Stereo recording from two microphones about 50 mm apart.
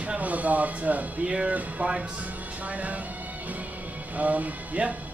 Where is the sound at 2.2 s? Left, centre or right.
Right.